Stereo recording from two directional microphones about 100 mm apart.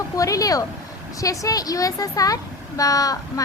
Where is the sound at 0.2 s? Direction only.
35° left (ahead or behind).